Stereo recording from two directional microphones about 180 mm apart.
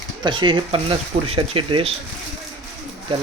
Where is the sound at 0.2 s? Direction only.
25° right (ahead or behind).